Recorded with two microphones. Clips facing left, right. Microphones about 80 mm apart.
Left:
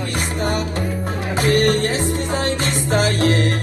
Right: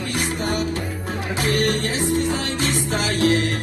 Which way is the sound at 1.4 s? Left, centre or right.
Left.